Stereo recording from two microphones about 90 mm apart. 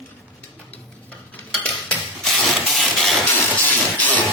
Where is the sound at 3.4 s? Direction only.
20° left (ahead or behind).